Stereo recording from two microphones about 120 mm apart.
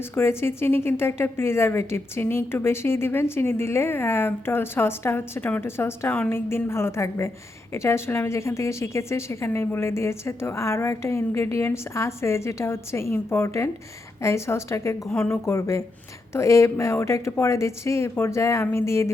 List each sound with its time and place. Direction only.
0.1 s speech: 20° left (ahead or behind)